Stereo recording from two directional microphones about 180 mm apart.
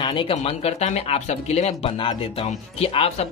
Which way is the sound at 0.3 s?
35° left (ahead or behind).